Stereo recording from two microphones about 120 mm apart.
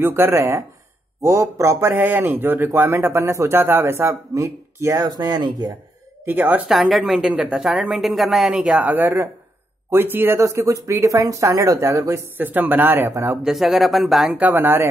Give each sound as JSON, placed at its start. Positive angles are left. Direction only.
{"t": 0.0, "sound": "a man's voice", "side_deg": -20}
{"t": 6.2, "sound": "speech", "side_deg": -15}
{"t": 6.7, "sound": "a woman's voice", "side_deg": 0}
{"t": 12.4, "sound": "speech", "side_deg": -15}
{"t": 13.4, "sound": "a woman's voice", "side_deg": -5}
{"t": 14.4, "sound": "speech", "side_deg": -15}